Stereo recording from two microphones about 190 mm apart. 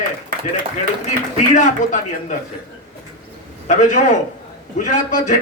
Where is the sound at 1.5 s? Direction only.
40° left (ahead or behind).